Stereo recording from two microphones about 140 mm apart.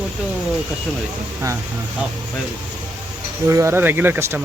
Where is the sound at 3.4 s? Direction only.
20° right (ahead or behind).